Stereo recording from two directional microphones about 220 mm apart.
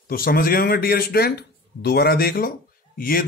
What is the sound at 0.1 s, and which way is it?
Music, 40° left (ahead or behind).